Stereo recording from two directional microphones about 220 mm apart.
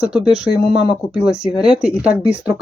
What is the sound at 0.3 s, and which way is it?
Speech, centre (ahead or behind).